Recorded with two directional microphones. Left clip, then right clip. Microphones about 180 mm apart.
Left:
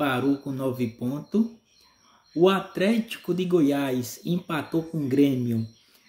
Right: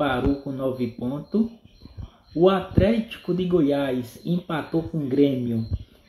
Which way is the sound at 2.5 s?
15° left (ahead or behind).